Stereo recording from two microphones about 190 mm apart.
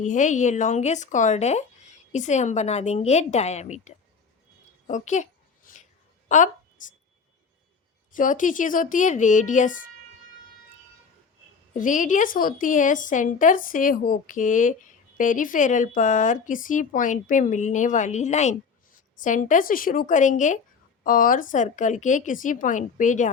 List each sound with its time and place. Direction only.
0.0 s speech: 40° left (ahead or behind)
4.9 s a sound: 40° left (ahead or behind)
8.1 s a woman's voice: 45° left (ahead or behind)
11.7 s a woman's voice: 40° left (ahead or behind)